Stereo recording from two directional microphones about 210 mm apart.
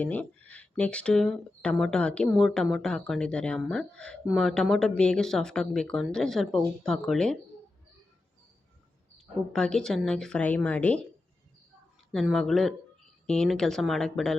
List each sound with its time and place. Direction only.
0.0 s speech: 5° left (ahead or behind)
9.5 s speech: 5° left (ahead or behind)
12.1 s speech: centre (ahead or behind)